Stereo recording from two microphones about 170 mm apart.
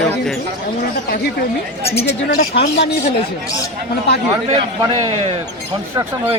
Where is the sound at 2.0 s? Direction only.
75° left (ahead or behind).